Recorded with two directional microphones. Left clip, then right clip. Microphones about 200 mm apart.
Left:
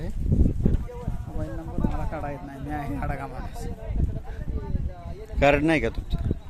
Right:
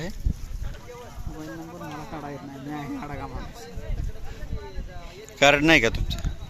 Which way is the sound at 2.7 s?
20° left (ahead or behind).